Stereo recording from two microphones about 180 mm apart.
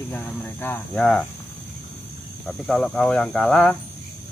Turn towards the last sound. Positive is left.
turn(degrees=0)  # may be behind; listen again after turning